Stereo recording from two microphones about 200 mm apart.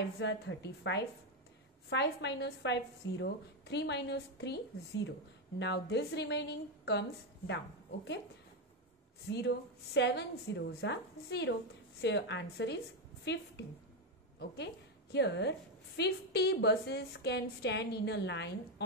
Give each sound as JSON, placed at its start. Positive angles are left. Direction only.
{"t": 0.2, "sound": "a woman's voice", "side_deg": 60}
{"t": 9.3, "sound": "a woman's voice", "side_deg": 55}
{"t": 14.6, "sound": "a woman's voice", "side_deg": 60}